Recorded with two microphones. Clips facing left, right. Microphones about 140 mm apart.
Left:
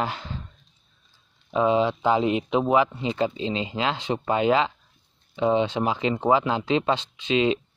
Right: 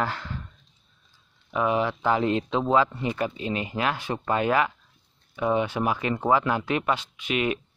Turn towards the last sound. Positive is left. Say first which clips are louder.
# left 4 dB
turn(degrees=25)  # may be behind; listen again after turning